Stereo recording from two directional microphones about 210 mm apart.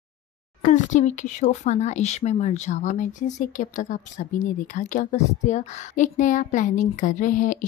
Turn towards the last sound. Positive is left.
turn(degrees=40)  # may be behind; listen again after turning